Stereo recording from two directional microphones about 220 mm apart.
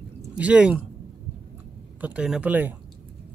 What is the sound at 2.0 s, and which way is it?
Speech, 5° right (ahead or behind).